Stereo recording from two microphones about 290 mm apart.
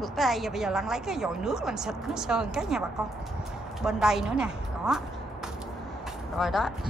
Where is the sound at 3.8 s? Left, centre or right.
Centre.